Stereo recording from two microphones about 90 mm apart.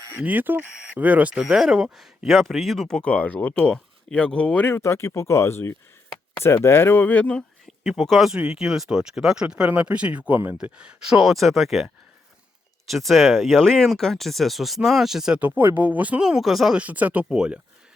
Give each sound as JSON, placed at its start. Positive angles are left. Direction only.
{"t": 0.2, "sound": "speech", "side_deg": -20}
{"t": 7.9, "sound": "speech", "side_deg": 0}
{"t": 12.9, "sound": "speech", "side_deg": 0}
{"t": 15.4, "sound": "speech", "side_deg": -20}
{"t": 16.8, "sound": "speech", "side_deg": -15}